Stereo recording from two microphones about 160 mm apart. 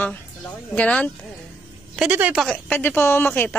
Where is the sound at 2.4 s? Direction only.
10° left (ahead or behind).